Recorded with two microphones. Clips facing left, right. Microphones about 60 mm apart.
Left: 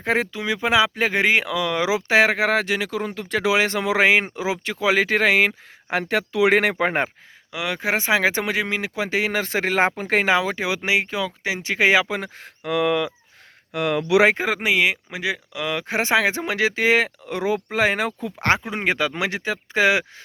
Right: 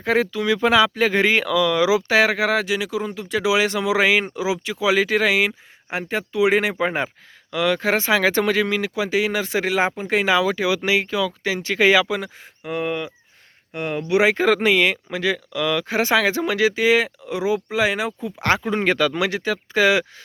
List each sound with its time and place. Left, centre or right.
0.0 s speech: left
5.9 s speech: left
7.5 s speech: centre
12.4 s speech: left
14.3 s speech: centre; by 17.1 s left
17.2 s speech: left
18.6 s speech: centre